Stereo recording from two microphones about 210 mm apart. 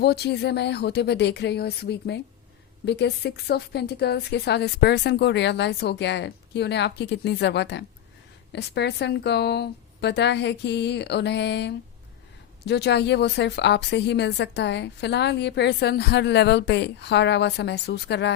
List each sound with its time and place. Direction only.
0.0 s a woman's voice: 50° left (ahead or behind)